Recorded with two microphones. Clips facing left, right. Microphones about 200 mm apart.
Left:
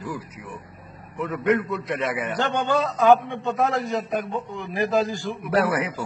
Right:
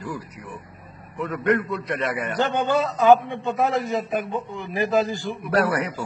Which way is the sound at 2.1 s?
Centre (ahead or behind).